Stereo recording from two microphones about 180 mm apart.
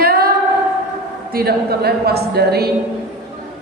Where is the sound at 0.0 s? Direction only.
55° right (ahead or behind).